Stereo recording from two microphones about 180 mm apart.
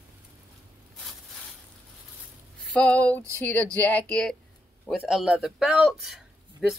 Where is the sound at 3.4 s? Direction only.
10° left (ahead or behind).